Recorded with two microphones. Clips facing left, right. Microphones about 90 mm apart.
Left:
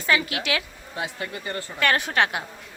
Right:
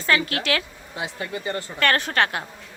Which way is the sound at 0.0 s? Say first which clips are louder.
Right 1 dB; 15° left (ahead or behind).